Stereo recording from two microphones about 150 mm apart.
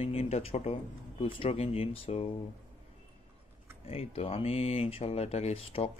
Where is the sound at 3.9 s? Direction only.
40° left (ahead or behind).